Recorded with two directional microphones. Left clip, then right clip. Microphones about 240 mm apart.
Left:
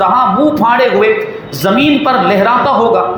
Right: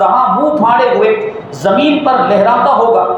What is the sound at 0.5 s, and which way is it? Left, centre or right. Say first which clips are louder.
A man's voice: even; left.